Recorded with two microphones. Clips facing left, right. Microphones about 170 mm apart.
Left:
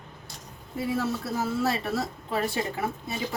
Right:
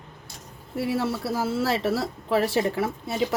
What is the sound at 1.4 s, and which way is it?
Speech, 90° right.